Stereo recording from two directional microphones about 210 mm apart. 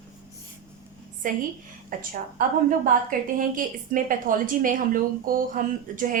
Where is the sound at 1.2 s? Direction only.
40° right (ahead or behind).